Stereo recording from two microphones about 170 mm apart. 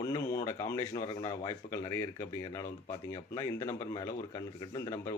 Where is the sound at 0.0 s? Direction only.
20° left (ahead or behind).